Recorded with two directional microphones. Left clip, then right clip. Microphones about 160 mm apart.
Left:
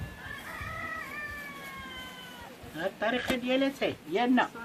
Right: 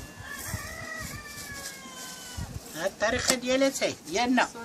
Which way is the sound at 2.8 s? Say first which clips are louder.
Right 3 dB; 5° right (ahead or behind).